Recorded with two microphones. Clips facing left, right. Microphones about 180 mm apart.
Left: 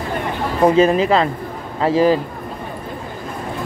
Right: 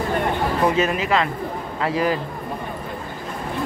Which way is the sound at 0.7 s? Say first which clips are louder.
Left 6 dB; 35° left (ahead or behind).